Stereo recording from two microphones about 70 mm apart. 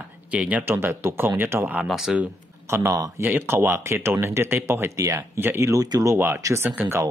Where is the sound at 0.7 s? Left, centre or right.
Right.